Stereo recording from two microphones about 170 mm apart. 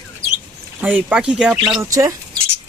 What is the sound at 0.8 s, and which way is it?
Speech, 10° right (ahead or behind).